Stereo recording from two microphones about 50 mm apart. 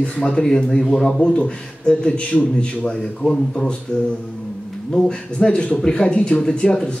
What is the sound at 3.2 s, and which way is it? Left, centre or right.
Speech, centre.